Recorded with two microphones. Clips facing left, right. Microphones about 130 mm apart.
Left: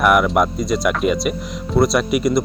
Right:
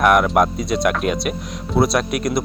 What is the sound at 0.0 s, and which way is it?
Speech, centre (ahead or behind).